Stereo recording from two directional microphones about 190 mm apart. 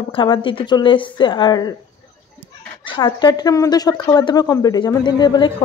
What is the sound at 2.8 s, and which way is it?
Speech, 25° left (ahead or behind).